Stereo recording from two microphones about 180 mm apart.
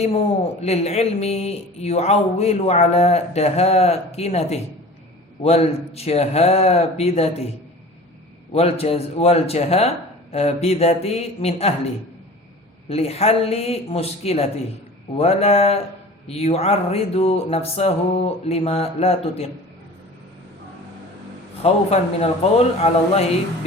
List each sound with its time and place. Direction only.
0.6 s speech: 35° left (ahead or behind)
8.5 s speech: 35° left (ahead or behind)
12.9 s speech: 35° left (ahead or behind)
21.6 s speech: 35° left (ahead or behind)